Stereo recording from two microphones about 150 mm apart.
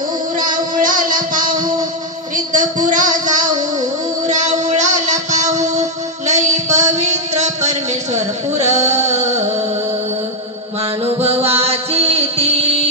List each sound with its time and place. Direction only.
0.4 s music: 65° right (ahead or behind)
2.3 s a sound: 60° right (ahead or behind)
4.3 s music: 55° right (ahead or behind)
11.1 s music: 45° right (ahead or behind)